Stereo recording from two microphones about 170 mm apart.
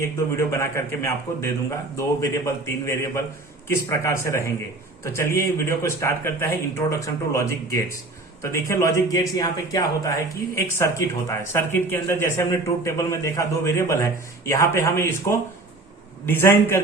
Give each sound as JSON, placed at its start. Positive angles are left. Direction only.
{"t": 0.0, "sound": "speech", "side_deg": 15}